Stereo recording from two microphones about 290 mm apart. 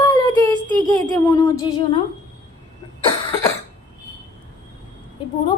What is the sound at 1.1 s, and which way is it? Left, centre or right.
Speech, centre.